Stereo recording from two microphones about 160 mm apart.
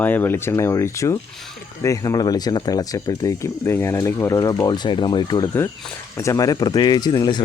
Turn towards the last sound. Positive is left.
turn(degrees=25)  # may be behind; listen again after turning